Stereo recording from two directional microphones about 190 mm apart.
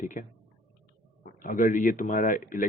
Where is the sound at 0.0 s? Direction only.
45° left (ahead or behind).